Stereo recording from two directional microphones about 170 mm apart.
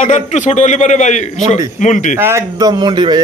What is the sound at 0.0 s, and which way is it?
A man's voice, 45° left (ahead or behind).